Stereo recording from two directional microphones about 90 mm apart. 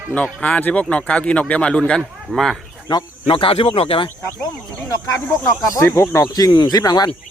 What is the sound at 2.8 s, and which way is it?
Speech, 65° left (ahead or behind).